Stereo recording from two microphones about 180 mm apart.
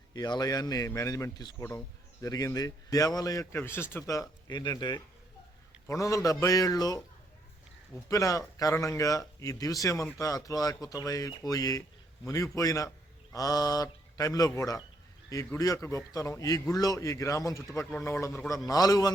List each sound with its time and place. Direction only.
0.1 s speech: 20° left (ahead or behind)
8.1 s a man's voice: 20° left (ahead or behind)